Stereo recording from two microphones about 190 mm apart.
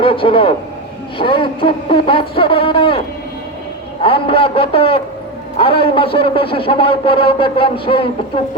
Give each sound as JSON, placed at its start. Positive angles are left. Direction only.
{"t": 0.0, "sound": "a man's voice", "side_deg": 30}
{"t": 4.0, "sound": "a man's voice", "side_deg": 30}